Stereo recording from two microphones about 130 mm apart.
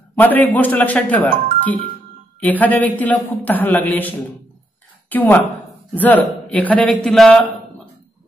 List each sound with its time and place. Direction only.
0.2 s a man's voice: 15° left (ahead or behind)
5.1 s a man's voice: 15° left (ahead or behind)